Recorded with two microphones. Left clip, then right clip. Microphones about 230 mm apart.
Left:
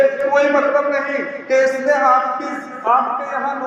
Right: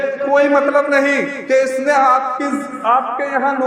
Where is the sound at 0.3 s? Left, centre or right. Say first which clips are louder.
Right 4 dB; right.